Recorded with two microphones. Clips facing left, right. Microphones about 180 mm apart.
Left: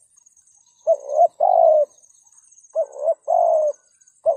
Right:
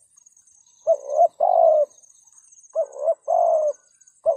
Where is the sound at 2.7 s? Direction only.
35° left (ahead or behind).